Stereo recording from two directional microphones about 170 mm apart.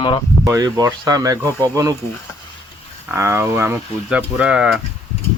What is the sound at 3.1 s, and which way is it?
Speech, 15° right (ahead or behind).